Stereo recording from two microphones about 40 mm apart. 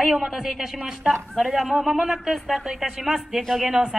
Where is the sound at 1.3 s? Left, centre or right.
Centre.